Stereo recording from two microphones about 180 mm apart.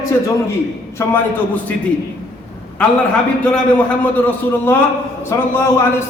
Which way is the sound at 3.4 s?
10° left (ahead or behind).